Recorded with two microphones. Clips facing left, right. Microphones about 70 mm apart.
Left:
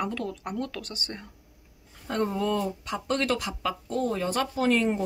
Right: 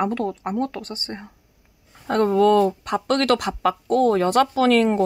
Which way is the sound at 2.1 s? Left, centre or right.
Right.